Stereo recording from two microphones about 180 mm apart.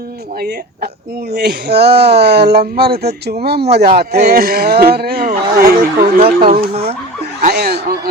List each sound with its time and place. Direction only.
0.3 s speech: 60° right (ahead or behind)
6.2 s speech: 35° right (ahead or behind)
7.4 s snicker: 60° right (ahead or behind)